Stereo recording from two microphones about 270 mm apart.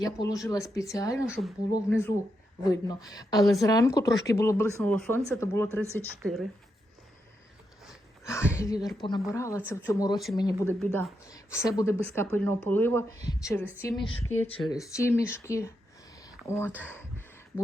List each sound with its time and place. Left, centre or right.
0.0 s speech: centre
1.3 s speech: centre
8.2 s a woman's voice: centre
14.3 s speech: left
14.7 s speech: centre
16.8 s a sound: centre